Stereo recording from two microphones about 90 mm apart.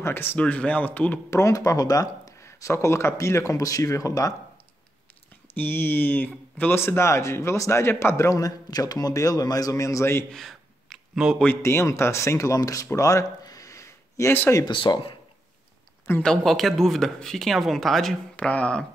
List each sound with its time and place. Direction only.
0.0 s speech: 25° left (ahead or behind)
0.4 s speech: 15° left (ahead or behind)
1.3 s speech: 35° left (ahead or behind)
5.5 s speech: 25° left (ahead or behind)
10.3 s a sound: centre (ahead or behind)
11.6 s speech: 30° left (ahead or behind)
12.9 s a sound: 40° left (ahead or behind)
14.7 s speech: 70° left (ahead or behind)
16.2 s speech: 5° left (ahead or behind)
18.3 s speech: 15° left (ahead or behind)